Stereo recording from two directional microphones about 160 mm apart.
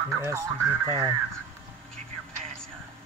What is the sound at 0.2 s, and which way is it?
Speech, 20° right (ahead or behind).